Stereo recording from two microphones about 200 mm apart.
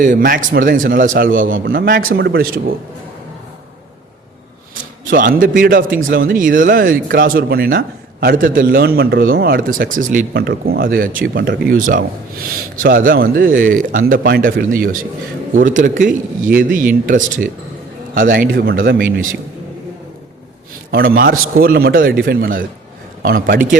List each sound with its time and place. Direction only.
0.0 s speech: 40° right (ahead or behind)
4.7 s a man's voice: 45° right (ahead or behind)
20.9 s speech: 45° right (ahead or behind)